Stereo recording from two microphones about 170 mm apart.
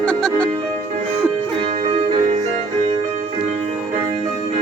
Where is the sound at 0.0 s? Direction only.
5° left (ahead or behind).